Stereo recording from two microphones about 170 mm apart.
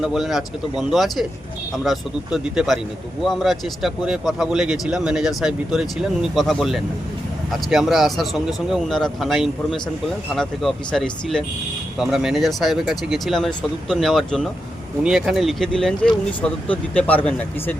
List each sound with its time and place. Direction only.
0.0 s speech: centre (ahead or behind)